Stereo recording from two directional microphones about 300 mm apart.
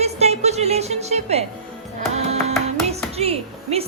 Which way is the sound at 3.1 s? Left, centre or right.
Centre.